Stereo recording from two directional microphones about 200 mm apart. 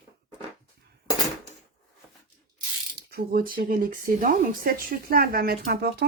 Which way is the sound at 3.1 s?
45° right (ahead or behind).